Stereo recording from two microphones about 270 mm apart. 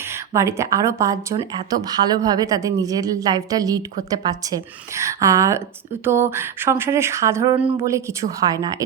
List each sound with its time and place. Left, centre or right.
0.0 s speech: centre